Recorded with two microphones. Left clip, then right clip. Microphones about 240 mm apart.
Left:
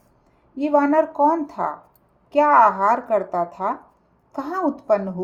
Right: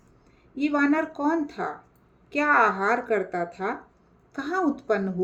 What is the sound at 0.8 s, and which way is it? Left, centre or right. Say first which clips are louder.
Speech: left 8 dB; centre.